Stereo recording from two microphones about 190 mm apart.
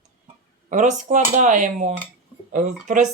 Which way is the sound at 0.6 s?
40° right (ahead or behind).